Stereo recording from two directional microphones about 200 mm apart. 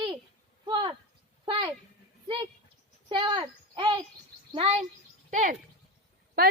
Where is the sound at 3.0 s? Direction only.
25° right (ahead or behind).